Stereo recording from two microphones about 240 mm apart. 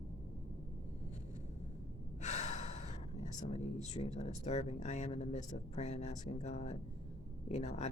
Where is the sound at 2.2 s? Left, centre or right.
Left.